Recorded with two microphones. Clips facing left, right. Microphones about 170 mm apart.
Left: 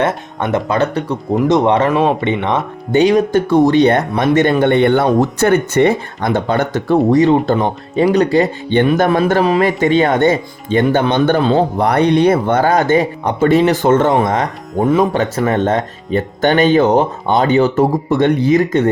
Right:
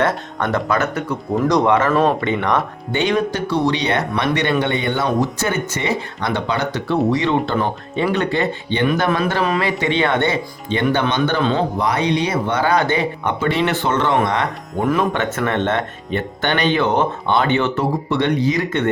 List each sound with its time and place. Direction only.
0.0 s speech: 20° left (ahead or behind)
1.9 s speech: 10° left (ahead or behind)
2.2 s speech: 25° left (ahead or behind)
2.9 s speech: 40° left (ahead or behind)
11.8 s speech: 60° left (ahead or behind)